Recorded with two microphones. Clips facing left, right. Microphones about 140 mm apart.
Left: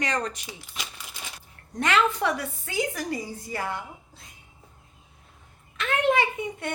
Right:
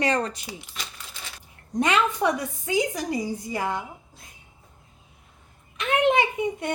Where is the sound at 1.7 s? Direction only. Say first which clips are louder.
Right 1 dB; 15° right (ahead or behind).